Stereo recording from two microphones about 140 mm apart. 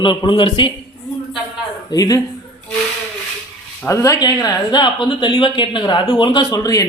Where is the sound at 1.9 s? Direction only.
25° left (ahead or behind).